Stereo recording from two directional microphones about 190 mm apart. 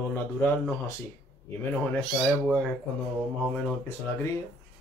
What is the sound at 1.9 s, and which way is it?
Speech, 5° left (ahead or behind).